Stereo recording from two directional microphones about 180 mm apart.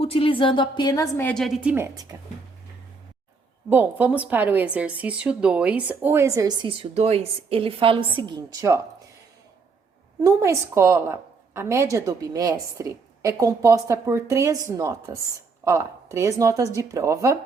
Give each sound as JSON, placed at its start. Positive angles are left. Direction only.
{"t": 0.0, "sound": "a woman's voice", "side_deg": 30}
{"t": 1.3, "sound": "a woman's voice", "side_deg": 0}
{"t": 1.7, "sound": "a woman's voice", "side_deg": -15}
{"t": 3.7, "sound": "a woman's voice", "side_deg": -10}
{"t": 10.2, "sound": "a woman's voice", "side_deg": -15}